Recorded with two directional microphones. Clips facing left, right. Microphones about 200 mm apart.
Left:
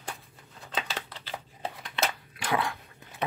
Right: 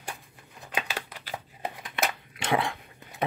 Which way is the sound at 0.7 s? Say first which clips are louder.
Right 1 dB; 10° right (ahead or behind).